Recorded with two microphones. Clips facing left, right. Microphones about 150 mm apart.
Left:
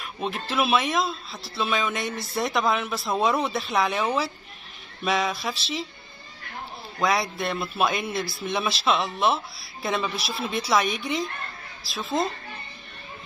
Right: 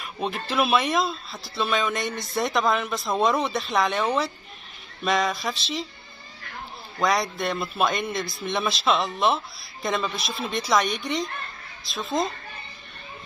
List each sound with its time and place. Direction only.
0.0 s speech: centre (ahead or behind)
7.0 s speech: centre (ahead or behind)